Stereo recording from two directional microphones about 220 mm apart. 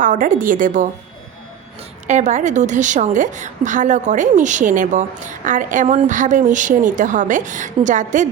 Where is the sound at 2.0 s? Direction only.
35° right (ahead or behind).